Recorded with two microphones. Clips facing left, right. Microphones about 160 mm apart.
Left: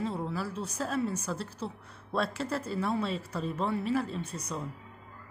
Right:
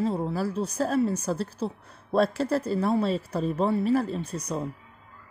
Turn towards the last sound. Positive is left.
turn(degrees=-35)  # may be behind; listen again after turning